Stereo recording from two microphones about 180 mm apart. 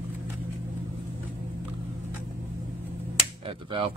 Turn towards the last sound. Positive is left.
turn(degrees=-30)  # may be behind; listen again after turning